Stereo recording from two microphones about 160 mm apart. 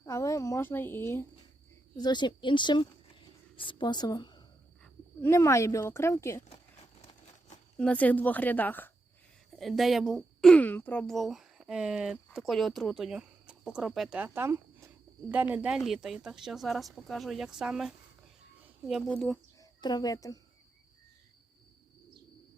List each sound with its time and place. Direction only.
0.0 s a woman's voice: 20° left (ahead or behind)
2.0 s speech: 25° left (ahead or behind)
4.8 s speech: 15° left (ahead or behind)
7.8 s a woman's voice: 10° left (ahead or behind)
9.5 s speech: centre (ahead or behind)
19.5 s speech: 25° left (ahead or behind)